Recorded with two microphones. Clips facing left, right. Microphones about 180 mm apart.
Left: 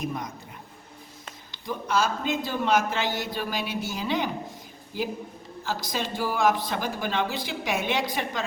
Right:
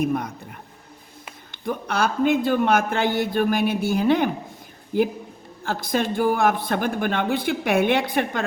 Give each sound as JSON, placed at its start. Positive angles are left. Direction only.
{"t": 0.0, "sound": "speech", "side_deg": -60}
{"t": 1.5, "sound": "speech", "side_deg": -60}